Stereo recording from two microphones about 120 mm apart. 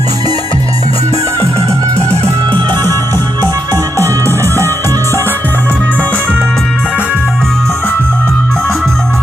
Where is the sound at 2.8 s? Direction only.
20° left (ahead or behind).